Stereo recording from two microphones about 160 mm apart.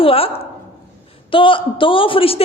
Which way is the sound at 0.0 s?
35° left (ahead or behind).